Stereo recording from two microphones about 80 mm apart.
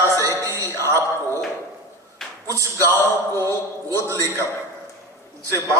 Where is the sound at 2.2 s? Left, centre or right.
Centre.